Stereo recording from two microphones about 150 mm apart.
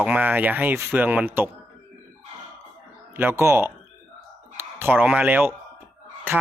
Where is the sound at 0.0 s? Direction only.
10° right (ahead or behind).